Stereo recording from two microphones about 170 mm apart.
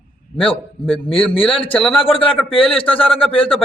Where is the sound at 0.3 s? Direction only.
30° left (ahead or behind).